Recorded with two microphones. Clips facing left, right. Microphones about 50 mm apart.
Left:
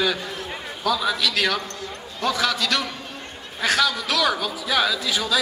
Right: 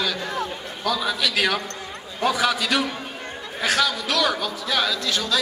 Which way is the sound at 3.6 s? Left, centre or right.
Centre.